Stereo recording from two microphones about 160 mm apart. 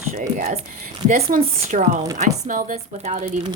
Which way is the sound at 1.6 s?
50° right (ahead or behind).